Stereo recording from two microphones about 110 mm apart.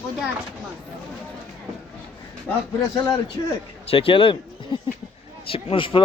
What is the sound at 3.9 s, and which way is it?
A man's voice, 55° left (ahead or behind).